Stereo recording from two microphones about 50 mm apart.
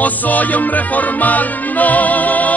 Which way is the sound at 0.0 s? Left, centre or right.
Left.